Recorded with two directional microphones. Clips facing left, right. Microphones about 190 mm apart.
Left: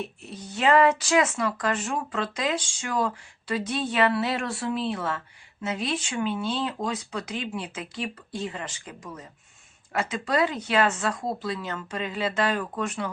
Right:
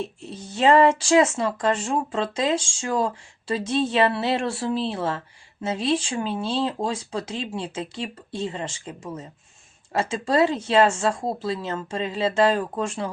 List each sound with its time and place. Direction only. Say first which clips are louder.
0.0 s speech: right 3 dB; 25° right (ahead or behind)